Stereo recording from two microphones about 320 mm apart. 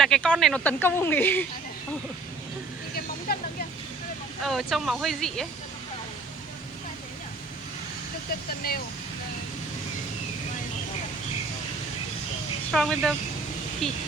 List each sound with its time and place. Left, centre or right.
0.0 s speech: centre
3.3 s vehicle: left
4.4 s speech: centre
8.6 s speech: left
12.7 s speech: centre